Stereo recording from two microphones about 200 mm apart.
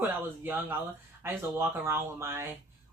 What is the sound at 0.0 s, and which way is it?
Speech, 10° right (ahead or behind).